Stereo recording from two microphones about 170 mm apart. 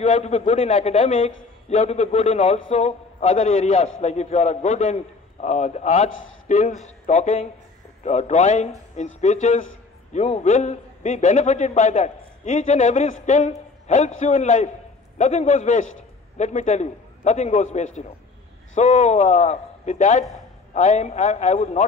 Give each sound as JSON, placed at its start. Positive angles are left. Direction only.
{"t": 0.0, "sound": "a man's voice", "side_deg": 40}